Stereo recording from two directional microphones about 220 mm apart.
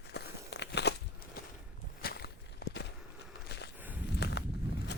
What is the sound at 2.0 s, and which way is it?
Walk, 45° left (ahead or behind).